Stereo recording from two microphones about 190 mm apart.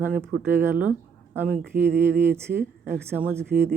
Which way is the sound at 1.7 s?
45° right (ahead or behind).